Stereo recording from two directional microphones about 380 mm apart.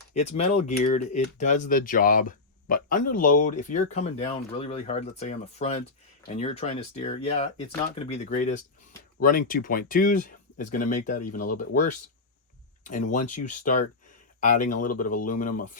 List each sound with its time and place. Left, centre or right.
0.1 s speech: centre
12.8 s speech: centre
13.2 s speech: left
14.4 s speech: left